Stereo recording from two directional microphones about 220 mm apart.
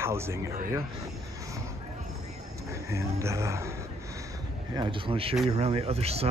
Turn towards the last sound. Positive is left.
turn(degrees=-30)  # may be behind; listen again after turning